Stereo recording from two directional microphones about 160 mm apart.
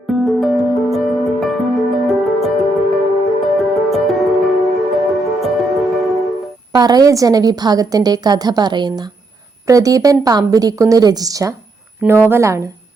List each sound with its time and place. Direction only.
0.1 s music: centre (ahead or behind)
6.7 s a woman's voice: 25° right (ahead or behind)